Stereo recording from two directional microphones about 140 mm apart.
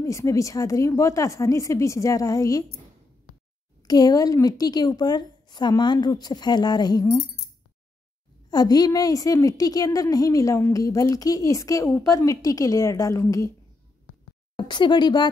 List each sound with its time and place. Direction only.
0.0 s a woman's voice: 20° left (ahead or behind)
3.8 s a woman's voice: 25° left (ahead or behind)
8.5 s a woman's voice: 30° left (ahead or behind)
14.6 s speech: 35° left (ahead or behind)